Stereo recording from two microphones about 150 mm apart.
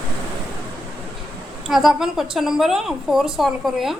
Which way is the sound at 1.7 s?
Centre (ahead or behind).